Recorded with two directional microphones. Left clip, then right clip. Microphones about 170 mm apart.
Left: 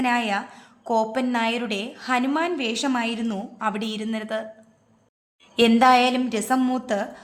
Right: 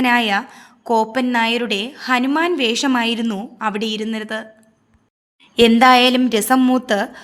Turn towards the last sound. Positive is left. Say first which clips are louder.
# right 7 dB
turn(degrees=-35)  # may be behind; listen again after turning